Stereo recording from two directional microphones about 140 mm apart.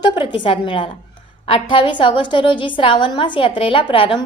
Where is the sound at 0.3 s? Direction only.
35° left (ahead or behind).